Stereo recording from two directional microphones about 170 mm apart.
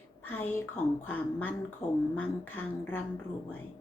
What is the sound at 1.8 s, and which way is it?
Speech, 45° left (ahead or behind).